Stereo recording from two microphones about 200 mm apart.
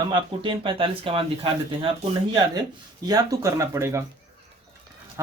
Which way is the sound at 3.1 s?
15° right (ahead or behind).